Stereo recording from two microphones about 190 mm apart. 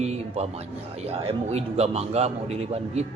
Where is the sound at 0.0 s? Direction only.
35° right (ahead or behind).